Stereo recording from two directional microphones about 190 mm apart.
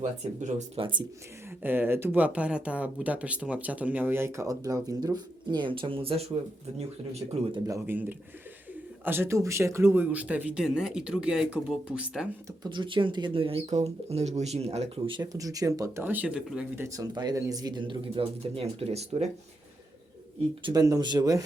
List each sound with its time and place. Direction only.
0.0 s speech: 40° right (ahead or behind)
1.5 s speech: 10° right (ahead or behind); by 7.6 s 35° right (ahead or behind)
7.7 s speech: 10° right (ahead or behind)
9.0 s speech: 10° right (ahead or behind)
12.6 s speech: 25° right (ahead or behind)
20.6 s speech: 20° right (ahead or behind)